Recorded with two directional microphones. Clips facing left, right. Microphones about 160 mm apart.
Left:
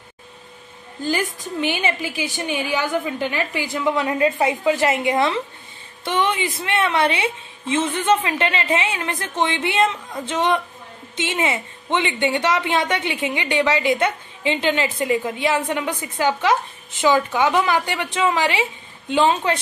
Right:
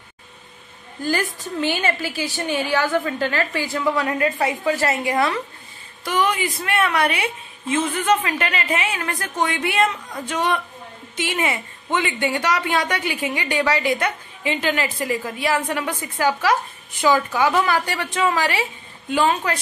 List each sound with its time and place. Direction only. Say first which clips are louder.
1.6 s a woman's voice: even; 15° left (ahead or behind)